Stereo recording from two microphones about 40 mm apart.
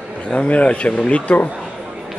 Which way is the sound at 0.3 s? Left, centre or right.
Left.